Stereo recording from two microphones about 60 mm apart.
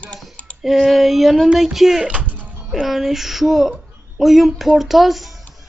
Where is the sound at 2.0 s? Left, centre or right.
Right.